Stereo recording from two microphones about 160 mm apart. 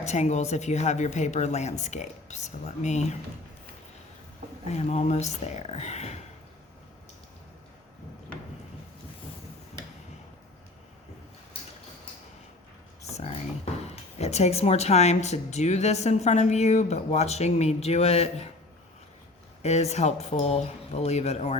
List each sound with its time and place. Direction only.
0.0 s speech: 45° left (ahead or behind)
4.7 s speech: 45° left (ahead or behind)
13.1 s a sound: 40° left (ahead or behind)
13.9 s speech: 40° left (ahead or behind)
19.6 s speech: 45° left (ahead or behind)